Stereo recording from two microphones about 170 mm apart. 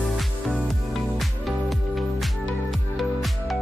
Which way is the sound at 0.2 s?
Centre (ahead or behind).